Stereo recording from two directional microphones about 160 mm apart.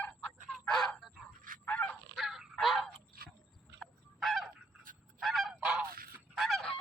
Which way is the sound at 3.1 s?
70° right (ahead or behind).